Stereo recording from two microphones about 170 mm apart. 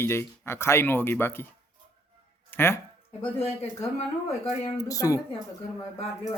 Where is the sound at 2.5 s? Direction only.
15° left (ahead or behind).